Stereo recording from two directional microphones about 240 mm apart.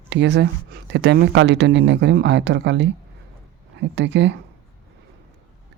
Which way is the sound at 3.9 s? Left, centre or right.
Right.